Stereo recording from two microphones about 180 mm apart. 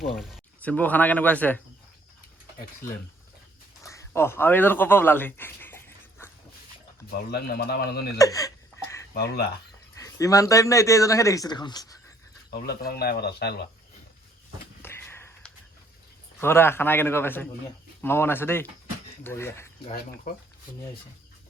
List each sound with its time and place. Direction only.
0.0 s speech: centre (ahead or behind)
3.8 s speech: 15° left (ahead or behind)
7.1 s a man's voice: 55° left (ahead or behind)
8.2 s a sound: 20° left (ahead or behind)
9.1 s a man's voice: 60° left (ahead or behind)
9.9 s speech: 20° left (ahead or behind)
12.5 s a man's voice: 60° left (ahead or behind)
14.8 s a sound: 15° left (ahead or behind)
16.4 s speech: 15° left (ahead or behind)
20.3 s speech: 50° left (ahead or behind)